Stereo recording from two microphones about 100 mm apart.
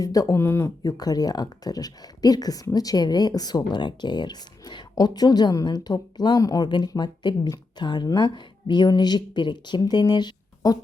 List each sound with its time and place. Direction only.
0.0 s speech: 35° left (ahead or behind)